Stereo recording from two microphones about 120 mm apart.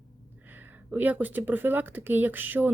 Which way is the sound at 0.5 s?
15° right (ahead or behind).